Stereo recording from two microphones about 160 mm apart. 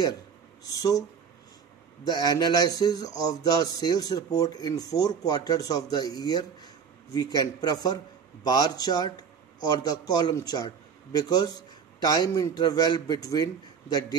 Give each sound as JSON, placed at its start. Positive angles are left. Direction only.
{"t": 2.0, "sound": "a man's voice", "side_deg": 25}